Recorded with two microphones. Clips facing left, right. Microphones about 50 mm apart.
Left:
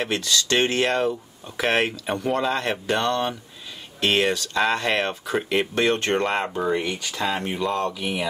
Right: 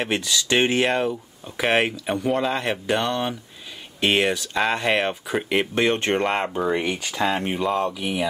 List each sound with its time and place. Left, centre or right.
0.0 s speech: centre
7.6 s speech: centre